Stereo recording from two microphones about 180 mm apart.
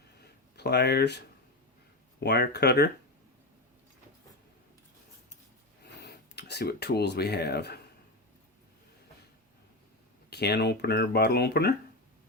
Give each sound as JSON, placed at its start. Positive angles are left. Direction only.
{"t": 0.5, "sound": "speech", "side_deg": 65}
{"t": 2.2, "sound": "speech", "side_deg": 65}
{"t": 5.8, "sound": "speech", "side_deg": 65}
{"t": 10.2, "sound": "speech", "side_deg": 65}